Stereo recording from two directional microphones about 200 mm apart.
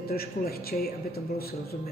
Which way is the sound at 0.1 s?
50° left (ahead or behind).